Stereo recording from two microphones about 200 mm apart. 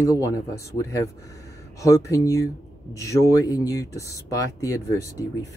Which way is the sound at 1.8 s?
15° left (ahead or behind).